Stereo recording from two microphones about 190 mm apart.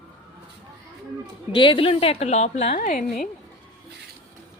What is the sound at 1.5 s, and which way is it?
A woman's voice, 25° left (ahead or behind).